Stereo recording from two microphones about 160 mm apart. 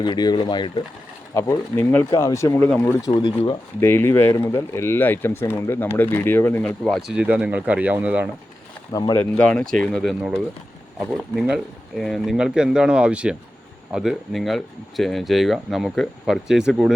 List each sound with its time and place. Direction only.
0.0 s speech: 25° left (ahead or behind)
1.3 s speech: 20° left (ahead or behind)
2.6 s speech: 10° left (ahead or behind)
3.1 s speech: 30° left (ahead or behind)
3.8 s speech: 15° left (ahead or behind); by 8.3 s 10° right (ahead or behind)
8.9 s speech: 25° left (ahead or behind)
9.3 s speech: 5° left (ahead or behind)
11.3 s speech: centre (ahead or behind)